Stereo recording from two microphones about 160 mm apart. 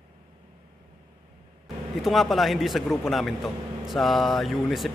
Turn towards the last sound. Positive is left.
turn(degrees=0)  # may be behind; listen again after turning